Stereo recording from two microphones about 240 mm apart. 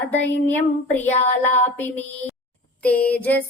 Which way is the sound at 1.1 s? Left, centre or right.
Left.